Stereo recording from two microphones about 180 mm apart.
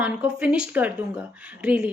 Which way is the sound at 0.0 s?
5° right (ahead or behind).